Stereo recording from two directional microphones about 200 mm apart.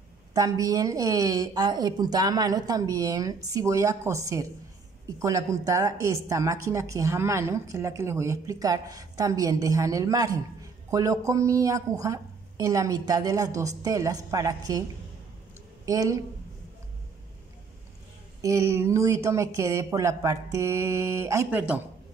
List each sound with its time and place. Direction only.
0.3 s a woman's voice: 15° right (ahead or behind)
18.4 s a woman's voice: 15° right (ahead or behind)